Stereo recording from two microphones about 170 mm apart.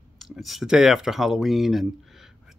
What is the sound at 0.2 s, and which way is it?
Speech, centre (ahead or behind).